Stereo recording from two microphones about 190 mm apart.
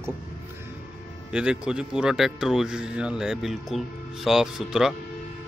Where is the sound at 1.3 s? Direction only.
5° right (ahead or behind).